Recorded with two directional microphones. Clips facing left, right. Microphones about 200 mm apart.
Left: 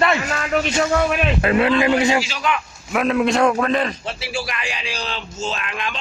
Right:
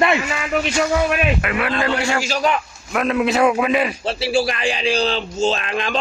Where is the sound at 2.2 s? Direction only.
40° right (ahead or behind).